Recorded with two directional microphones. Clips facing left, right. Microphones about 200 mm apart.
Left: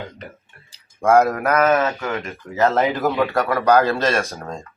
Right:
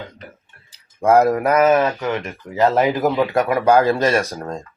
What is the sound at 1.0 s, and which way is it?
Speech, 5° right (ahead or behind).